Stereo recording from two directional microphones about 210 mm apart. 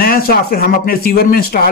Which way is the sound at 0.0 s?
45° left (ahead or behind).